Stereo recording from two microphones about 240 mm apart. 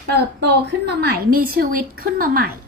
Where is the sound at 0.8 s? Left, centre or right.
Right.